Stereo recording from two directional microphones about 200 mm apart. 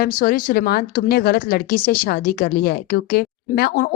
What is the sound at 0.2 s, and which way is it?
A woman's voice, 45° left (ahead or behind).